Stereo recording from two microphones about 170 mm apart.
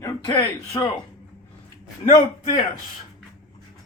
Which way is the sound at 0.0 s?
20° left (ahead or behind).